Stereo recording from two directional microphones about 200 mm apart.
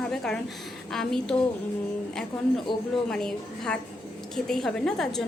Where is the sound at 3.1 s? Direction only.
5° left (ahead or behind).